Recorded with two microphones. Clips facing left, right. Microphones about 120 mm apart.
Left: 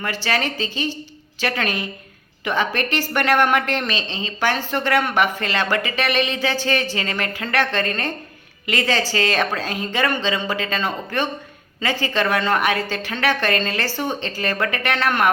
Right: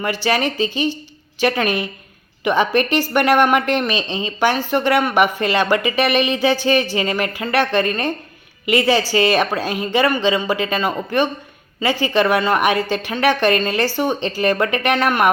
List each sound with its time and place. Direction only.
0.0 s a woman's voice: 15° right (ahead or behind)